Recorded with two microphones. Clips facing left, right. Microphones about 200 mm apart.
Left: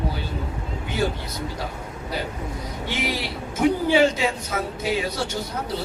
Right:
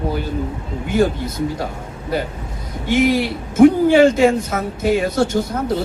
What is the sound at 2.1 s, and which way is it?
A man's voice, 50° right (ahead or behind).